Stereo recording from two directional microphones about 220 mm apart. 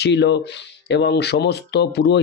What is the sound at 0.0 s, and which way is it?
Speech, 50° left (ahead or behind).